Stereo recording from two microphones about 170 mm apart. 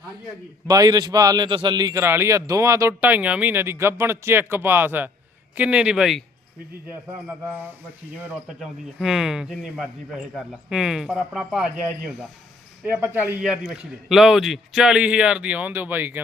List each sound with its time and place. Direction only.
0.7 s a man's voice: 20° right (ahead or behind); by 6.2 s centre (ahead or behind)
8.5 s a man's voice: centre (ahead or behind)